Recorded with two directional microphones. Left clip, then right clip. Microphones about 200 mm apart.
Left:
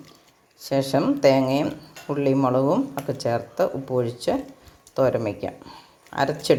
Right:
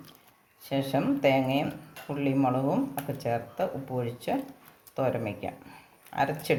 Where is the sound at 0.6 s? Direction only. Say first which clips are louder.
Left 7 dB; 35° left (ahead or behind).